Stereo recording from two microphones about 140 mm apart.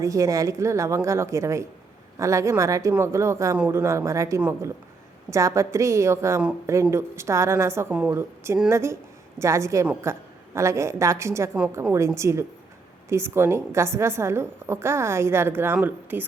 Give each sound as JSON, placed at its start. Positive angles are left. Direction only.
{"t": 0.0, "sound": "a woman's voice", "side_deg": -25}
{"t": 5.3, "sound": "a woman's voice", "side_deg": -20}